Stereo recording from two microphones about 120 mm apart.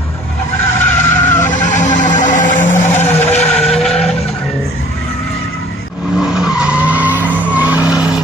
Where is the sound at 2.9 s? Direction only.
15° left (ahead or behind).